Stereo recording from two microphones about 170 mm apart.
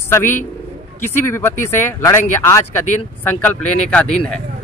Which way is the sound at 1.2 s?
15° left (ahead or behind).